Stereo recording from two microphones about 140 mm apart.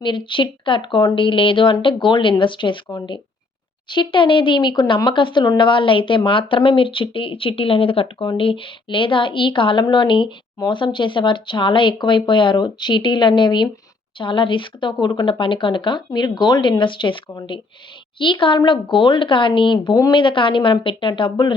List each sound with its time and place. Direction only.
0.0 s speech: 35° left (ahead or behind)